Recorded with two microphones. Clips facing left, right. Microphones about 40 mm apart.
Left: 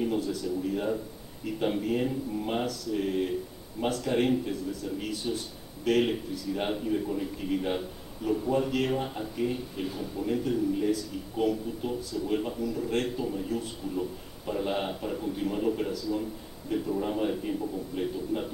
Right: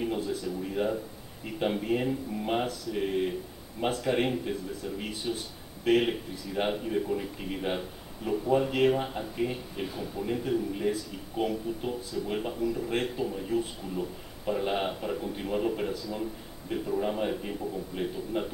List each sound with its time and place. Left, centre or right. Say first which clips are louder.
0.3 s a man's voice: left 2 dB; centre